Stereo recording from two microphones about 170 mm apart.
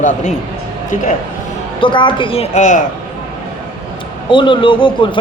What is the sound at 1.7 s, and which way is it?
A woman's voice, 30° left (ahead or behind).